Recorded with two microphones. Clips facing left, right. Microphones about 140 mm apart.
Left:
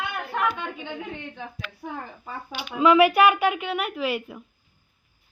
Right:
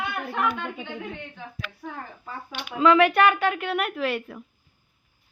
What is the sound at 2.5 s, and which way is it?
Speech, 10° left (ahead or behind).